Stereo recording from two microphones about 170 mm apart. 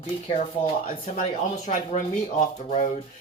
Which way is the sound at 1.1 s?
45° left (ahead or behind).